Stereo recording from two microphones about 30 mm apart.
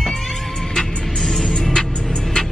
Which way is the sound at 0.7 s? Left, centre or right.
Centre.